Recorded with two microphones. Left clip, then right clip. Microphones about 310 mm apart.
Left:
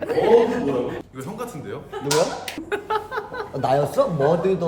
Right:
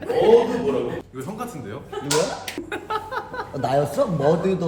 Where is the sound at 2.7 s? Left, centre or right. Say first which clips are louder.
Left 4 dB; centre.